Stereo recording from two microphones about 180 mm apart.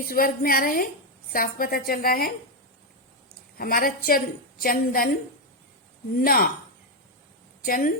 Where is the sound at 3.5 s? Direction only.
55° left (ahead or behind).